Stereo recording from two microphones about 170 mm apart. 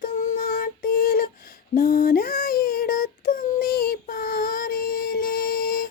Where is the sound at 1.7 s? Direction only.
60° left (ahead or behind).